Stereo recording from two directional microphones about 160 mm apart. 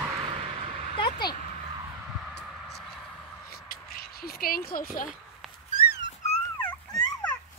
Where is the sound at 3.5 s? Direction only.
70° left (ahead or behind).